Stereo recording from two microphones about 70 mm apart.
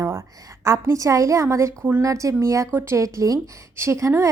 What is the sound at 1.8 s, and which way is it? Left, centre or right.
Speech, right.